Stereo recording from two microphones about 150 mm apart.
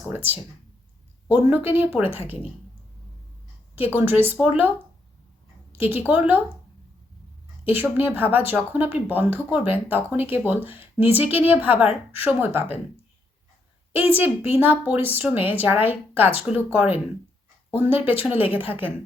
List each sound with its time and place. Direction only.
1.3 s speech: 10° right (ahead or behind)
3.8 s speech: 15° right (ahead or behind)
5.8 s speech: 15° right (ahead or behind)
7.6 s speech: 10° right (ahead or behind)
14.2 s speech: 15° right (ahead or behind)